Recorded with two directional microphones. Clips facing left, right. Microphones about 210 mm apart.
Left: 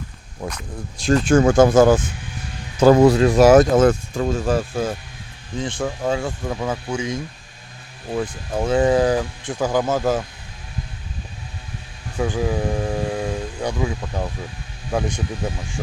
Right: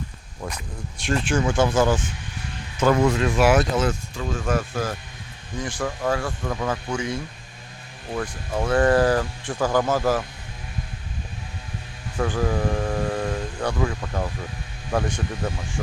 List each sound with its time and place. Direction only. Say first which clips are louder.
1.0 s speech: left 8 dB; 40° left (ahead or behind)
2.8 s speech: left 7 dB; 35° left (ahead or behind); by 4.3 s 50° left (ahead or behind)
4.3 s speech: left 3 dB; 30° left (ahead or behind)
6.0 s speech: left 1 dB; 15° left (ahead or behind)
12.2 s speech: left 2 dB; 10° left (ahead or behind)
14.9 s speech: left 1 dB; 10° left (ahead or behind)